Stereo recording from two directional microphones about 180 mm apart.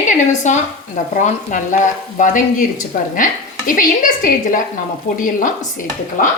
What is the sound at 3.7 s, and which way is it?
A woman's voice, 50° left (ahead or behind).